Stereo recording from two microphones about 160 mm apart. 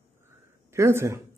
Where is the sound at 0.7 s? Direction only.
15° right (ahead or behind).